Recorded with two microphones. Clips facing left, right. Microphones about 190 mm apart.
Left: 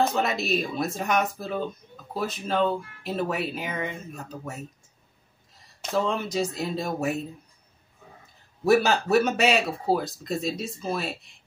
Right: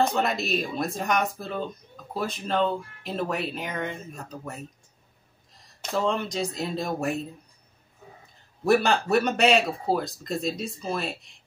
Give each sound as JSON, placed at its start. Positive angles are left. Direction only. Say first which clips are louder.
{"t": 0.0, "sound": "speech", "louder": "even", "side_deg": 0}
{"t": 8.6, "sound": "speech", "louder": "left 1 dB", "side_deg": 0}